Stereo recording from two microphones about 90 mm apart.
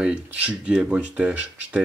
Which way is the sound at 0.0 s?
15° right (ahead or behind).